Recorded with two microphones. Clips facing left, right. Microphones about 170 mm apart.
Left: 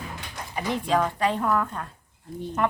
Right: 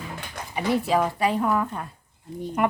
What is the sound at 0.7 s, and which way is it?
A woman's voice, 5° right (ahead or behind).